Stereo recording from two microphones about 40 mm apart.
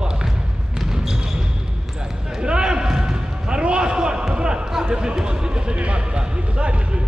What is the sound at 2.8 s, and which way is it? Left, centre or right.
Basketball bounce, centre.